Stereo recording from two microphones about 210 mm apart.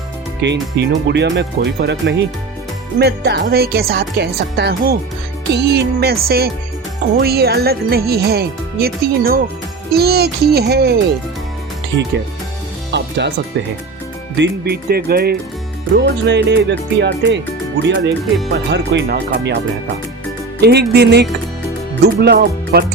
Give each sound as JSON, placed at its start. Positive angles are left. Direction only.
{"t": 0.4, "sound": "speech", "side_deg": -55}
{"t": 12.9, "sound": "music", "side_deg": -55}
{"t": 14.3, "sound": "speech", "side_deg": -55}
{"t": 18.5, "sound": "speech", "side_deg": -55}
{"t": 20.6, "sound": "speech", "side_deg": -50}